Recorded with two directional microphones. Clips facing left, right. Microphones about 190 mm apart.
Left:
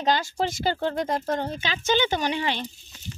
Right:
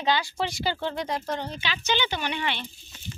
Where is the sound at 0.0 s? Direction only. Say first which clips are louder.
Left 2 dB; 45° left (ahead or behind).